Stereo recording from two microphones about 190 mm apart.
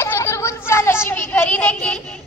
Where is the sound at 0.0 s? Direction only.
15° left (ahead or behind).